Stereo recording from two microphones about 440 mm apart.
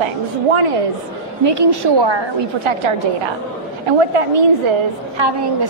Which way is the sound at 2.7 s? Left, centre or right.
Right.